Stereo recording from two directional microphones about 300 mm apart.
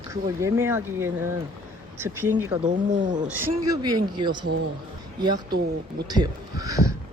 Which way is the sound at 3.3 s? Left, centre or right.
Centre.